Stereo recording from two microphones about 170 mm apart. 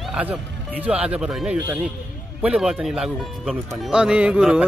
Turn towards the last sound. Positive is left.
turn(degrees=-5)  # may be behind; listen again after turning